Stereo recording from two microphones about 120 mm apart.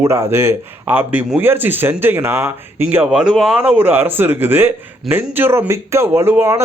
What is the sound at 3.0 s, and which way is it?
Speech, 5° right (ahead or behind).